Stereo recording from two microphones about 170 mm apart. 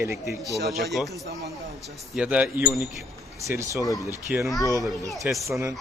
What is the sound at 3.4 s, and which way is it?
Speech, 20° right (ahead or behind).